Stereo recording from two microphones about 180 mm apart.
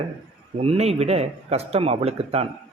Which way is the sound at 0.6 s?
35° right (ahead or behind).